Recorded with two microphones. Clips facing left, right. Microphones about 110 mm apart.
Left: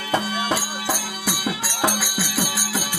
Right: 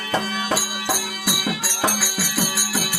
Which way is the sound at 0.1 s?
20° left (ahead or behind).